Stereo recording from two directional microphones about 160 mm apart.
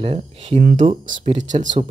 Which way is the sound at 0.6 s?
55° right (ahead or behind).